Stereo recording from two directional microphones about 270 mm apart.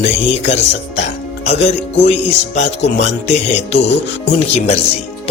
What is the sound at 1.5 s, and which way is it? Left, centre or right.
Music, left.